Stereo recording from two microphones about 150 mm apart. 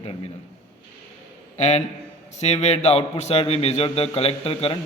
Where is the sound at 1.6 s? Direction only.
50° left (ahead or behind).